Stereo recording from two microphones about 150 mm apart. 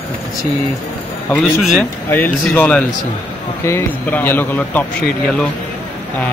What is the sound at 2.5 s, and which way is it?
Speech, 10° left (ahead or behind).